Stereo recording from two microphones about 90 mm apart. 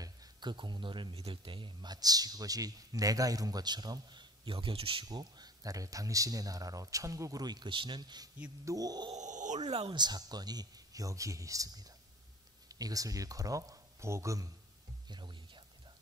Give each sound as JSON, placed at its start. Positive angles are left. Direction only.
{"t": 0.0, "sound": "speech", "side_deg": -50}
{"t": 5.0, "sound": "speech", "side_deg": -50}
{"t": 8.6, "sound": "speech", "side_deg": -45}
{"t": 15.0, "sound": "a sound", "side_deg": -55}